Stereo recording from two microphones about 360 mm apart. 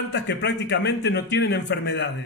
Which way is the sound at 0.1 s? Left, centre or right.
Left.